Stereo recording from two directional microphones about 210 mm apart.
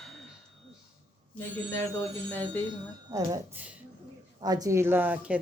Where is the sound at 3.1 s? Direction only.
15° right (ahead or behind).